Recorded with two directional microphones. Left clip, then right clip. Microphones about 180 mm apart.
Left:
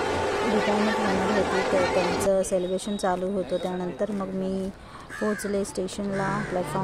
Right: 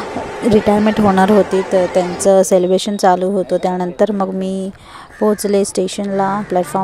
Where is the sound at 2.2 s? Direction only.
50° right (ahead or behind).